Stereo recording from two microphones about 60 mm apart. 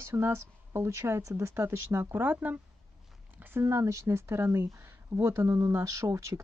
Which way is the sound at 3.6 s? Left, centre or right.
Right.